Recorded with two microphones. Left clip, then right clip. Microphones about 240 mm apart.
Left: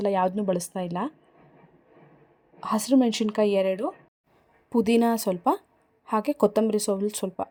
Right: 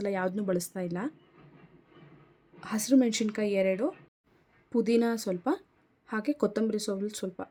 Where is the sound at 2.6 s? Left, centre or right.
Centre.